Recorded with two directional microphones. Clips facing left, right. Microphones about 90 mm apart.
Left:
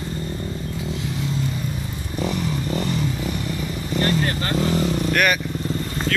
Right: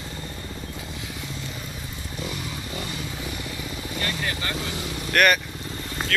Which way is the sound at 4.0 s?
45° left (ahead or behind).